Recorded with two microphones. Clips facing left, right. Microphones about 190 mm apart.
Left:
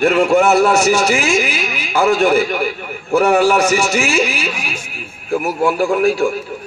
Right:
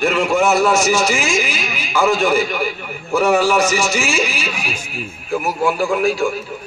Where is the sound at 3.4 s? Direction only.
60° left (ahead or behind).